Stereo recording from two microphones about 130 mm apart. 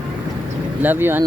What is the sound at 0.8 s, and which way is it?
Speech, 15° right (ahead or behind).